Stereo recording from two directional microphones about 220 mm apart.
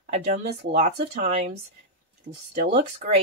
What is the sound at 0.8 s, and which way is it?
Speech, 40° right (ahead or behind).